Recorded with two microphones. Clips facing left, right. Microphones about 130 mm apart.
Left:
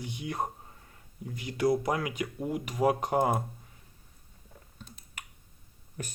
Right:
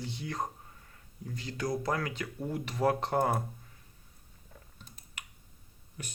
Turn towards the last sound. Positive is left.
turn(degrees=45)  # may be behind; listen again after turning